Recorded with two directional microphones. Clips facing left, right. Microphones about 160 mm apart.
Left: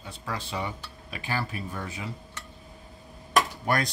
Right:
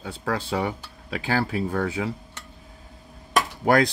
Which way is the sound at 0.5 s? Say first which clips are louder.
Right 7 dB; 85° right.